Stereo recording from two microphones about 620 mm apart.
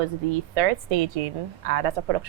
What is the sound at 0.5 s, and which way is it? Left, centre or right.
A woman's voice, right.